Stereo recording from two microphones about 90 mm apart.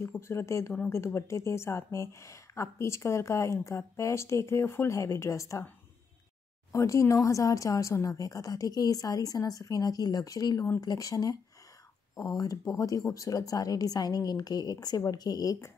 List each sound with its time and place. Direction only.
0.0 s a woman's voice: 30° left (ahead or behind)
6.7 s a woman's voice: 35° left (ahead or behind)